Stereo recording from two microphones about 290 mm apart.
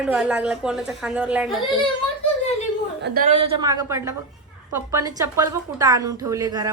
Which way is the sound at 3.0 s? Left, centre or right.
Right.